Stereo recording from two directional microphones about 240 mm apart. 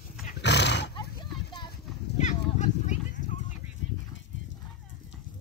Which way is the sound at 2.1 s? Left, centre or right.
Left.